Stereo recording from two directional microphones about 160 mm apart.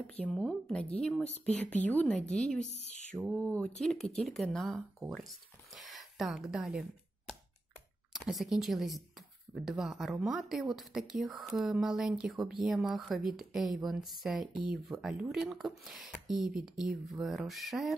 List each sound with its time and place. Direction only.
0.2 s a woman's voice: 5° left (ahead or behind)
2.6 s speech: 45° left (ahead or behind)
3.2 s a woman's voice: 5° left (ahead or behind)
4.7 s a woman's voice: 5° right (ahead or behind)
8.1 s speech: centre (ahead or behind)